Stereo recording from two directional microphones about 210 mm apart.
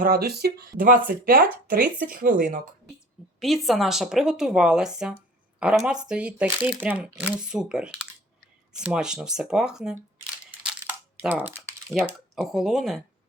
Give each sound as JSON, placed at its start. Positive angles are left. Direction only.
{"t": 0.0, "sound": "speech", "side_deg": -45}
{"t": 3.4, "sound": "speech", "side_deg": 0}
{"t": 11.2, "sound": "speech", "side_deg": -10}